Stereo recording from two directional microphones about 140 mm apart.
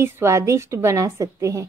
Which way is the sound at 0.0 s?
20° right (ahead or behind).